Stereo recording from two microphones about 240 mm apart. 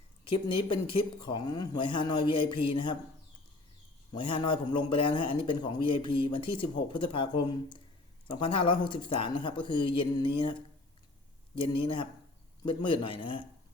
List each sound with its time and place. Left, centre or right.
0.3 s speech: left
4.1 s speech: left